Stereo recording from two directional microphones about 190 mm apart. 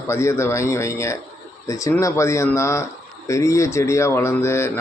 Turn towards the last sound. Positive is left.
turn(degrees=15)  # may be behind; listen again after turning